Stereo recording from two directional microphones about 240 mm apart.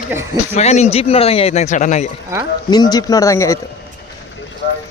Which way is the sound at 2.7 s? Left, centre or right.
Centre.